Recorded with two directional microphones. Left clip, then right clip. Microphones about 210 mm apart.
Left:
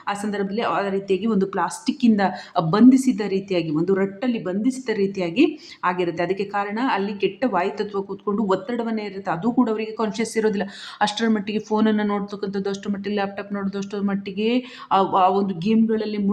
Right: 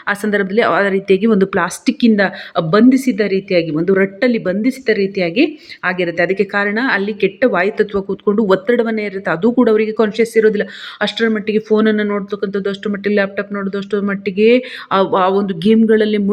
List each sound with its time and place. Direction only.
0.0 s a woman's voice: 15° right (ahead or behind)
10.1 s a woman's voice: 5° right (ahead or behind); by 16.3 s 20° right (ahead or behind)